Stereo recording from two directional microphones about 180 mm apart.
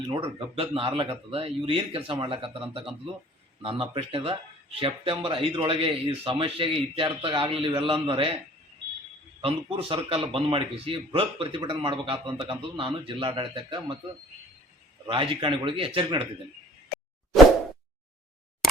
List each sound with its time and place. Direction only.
0.1 s speech: 30° right (ahead or behind)
9.4 s speech: 30° right (ahead or behind)
15.0 s speech: 30° right (ahead or behind)